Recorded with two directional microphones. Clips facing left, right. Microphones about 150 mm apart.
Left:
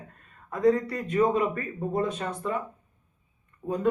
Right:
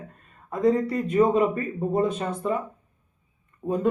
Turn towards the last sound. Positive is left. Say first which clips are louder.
# right 4 dB
turn(degrees=-25)  # may be behind; listen again after turning